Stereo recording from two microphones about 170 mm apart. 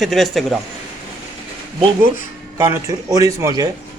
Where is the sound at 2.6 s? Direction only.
15° right (ahead or behind).